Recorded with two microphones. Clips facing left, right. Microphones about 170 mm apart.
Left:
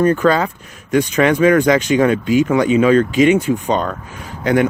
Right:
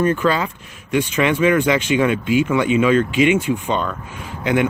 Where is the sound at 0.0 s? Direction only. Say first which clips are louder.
Left 4 dB; 40° left (ahead or behind).